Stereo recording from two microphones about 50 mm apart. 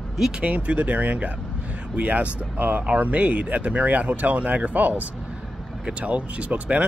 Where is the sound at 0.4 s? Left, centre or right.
Right.